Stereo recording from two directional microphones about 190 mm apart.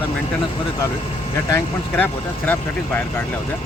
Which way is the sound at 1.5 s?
15° left (ahead or behind).